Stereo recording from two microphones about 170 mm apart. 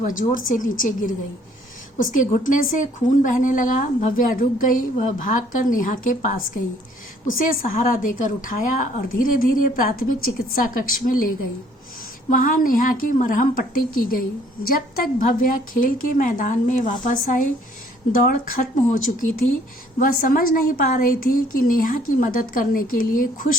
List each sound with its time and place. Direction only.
0.0 s a woman's voice: 50° left (ahead or behind)
12.3 s a woman's voice: 50° left (ahead or behind)